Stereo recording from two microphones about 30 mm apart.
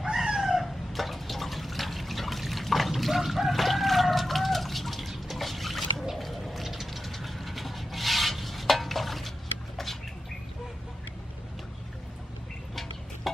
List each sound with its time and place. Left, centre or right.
0.1 s cat: centre
0.4 s liquid: centre
2.9 s chicken: centre
5.3 s drip: centre
6.1 s vehicle: centre